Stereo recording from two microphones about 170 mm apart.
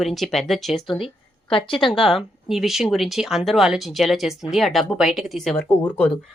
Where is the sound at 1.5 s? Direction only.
30° left (ahead or behind).